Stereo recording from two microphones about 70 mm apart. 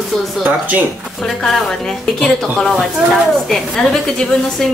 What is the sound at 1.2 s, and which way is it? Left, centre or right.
A woman's voice, centre.